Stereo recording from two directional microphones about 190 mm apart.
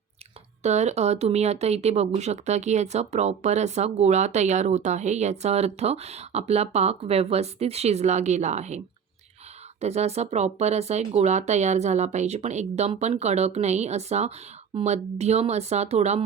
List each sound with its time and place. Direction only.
0.6 s speech: 35° right (ahead or behind)
9.8 s speech: 35° right (ahead or behind)